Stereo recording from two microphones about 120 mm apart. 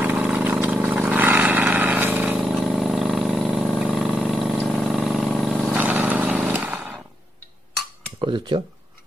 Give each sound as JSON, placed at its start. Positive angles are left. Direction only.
{"t": 0.0, "sound": "vehicle", "side_deg": -10}
{"t": 6.5, "sound": "a sound", "side_deg": -15}
{"t": 8.2, "sound": "speech", "side_deg": -40}